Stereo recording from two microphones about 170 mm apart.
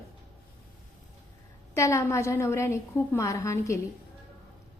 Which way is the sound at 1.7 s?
15° left (ahead or behind).